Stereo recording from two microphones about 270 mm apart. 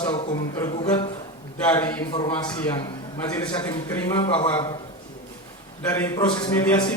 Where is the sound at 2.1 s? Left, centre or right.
Centre.